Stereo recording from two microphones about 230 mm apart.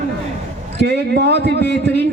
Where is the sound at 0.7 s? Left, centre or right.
Right.